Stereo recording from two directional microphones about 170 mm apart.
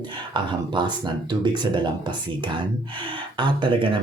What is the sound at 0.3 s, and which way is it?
Speech, 25° right (ahead or behind).